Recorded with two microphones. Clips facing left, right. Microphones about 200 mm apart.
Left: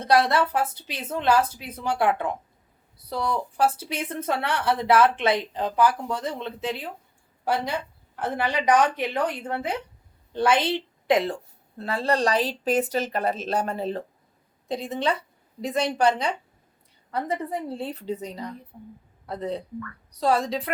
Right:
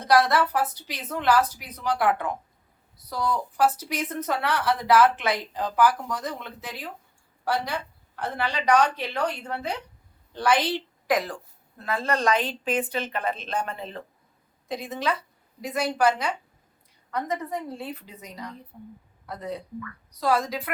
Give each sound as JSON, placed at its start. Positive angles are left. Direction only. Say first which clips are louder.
{"t": 0.0, "sound": "a woman's voice", "louder": "even", "side_deg": 25}
{"t": 17.1, "sound": "a woman's voice", "louder": "left 1 dB", "side_deg": 30}